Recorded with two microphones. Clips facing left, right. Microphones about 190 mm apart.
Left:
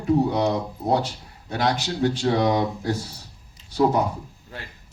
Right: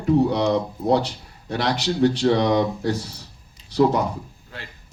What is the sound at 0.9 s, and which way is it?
Speech, 70° right (ahead or behind).